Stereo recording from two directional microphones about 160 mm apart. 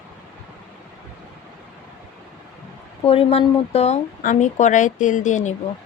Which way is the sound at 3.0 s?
35° left (ahead or behind).